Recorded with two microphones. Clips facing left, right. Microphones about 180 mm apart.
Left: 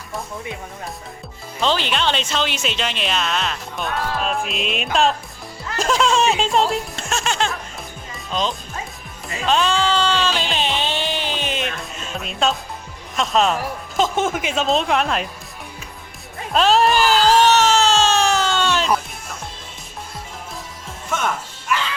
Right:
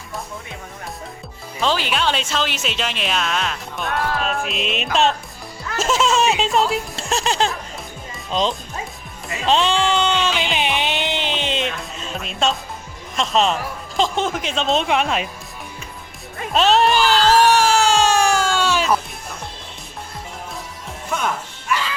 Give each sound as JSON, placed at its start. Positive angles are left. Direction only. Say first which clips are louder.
{"t": 1.5, "sound": "speech", "louder": "even", "side_deg": -5}
{"t": 7.1, "sound": "music", "louder": "right 2 dB", "side_deg": -35}
{"t": 8.3, "sound": "speech", "louder": "right 2 dB", "side_deg": -25}
{"t": 10.4, "sound": "music", "louder": "right 1 dB", "side_deg": -15}
{"t": 11.8, "sound": "music", "louder": "even", "side_deg": 0}
{"t": 13.1, "sound": "speech", "louder": "even", "side_deg": 0}
{"t": 16.5, "sound": "speech", "louder": "even", "side_deg": 0}
{"t": 17.4, "sound": "a sound", "louder": "even", "side_deg": -10}
{"t": 21.7, "sound": "music", "louder": "even", "side_deg": 0}